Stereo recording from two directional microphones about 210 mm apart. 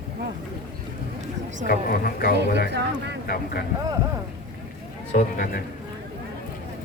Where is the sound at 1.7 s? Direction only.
45° left (ahead or behind).